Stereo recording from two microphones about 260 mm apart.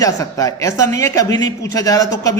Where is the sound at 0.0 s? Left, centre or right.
Centre.